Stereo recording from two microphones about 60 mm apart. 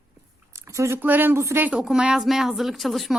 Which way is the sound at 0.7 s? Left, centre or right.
Right.